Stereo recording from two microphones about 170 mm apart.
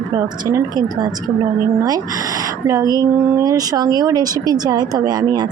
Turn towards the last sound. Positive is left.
turn(degrees=-25)  # may be behind; listen again after turning